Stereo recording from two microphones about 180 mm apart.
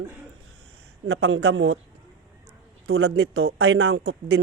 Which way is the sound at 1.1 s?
80° right.